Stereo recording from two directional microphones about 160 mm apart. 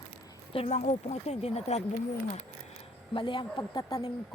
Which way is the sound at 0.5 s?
35° left (ahead or behind).